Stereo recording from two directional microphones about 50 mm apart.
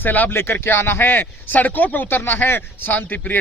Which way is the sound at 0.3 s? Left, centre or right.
Left.